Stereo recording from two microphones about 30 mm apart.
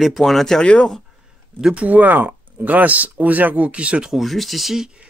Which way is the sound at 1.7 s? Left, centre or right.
Right.